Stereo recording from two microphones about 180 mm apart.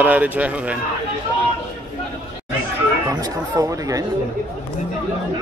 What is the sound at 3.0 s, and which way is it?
Speech, 20° right (ahead or behind).